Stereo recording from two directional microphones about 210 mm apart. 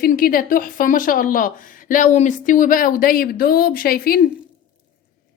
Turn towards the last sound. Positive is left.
turn(degrees=45)  # may be behind; listen again after turning